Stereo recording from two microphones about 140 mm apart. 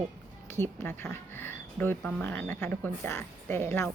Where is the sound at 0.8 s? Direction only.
15° left (ahead or behind).